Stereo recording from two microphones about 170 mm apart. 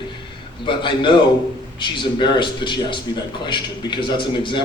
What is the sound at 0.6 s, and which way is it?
A man's voice, 30° left (ahead or behind).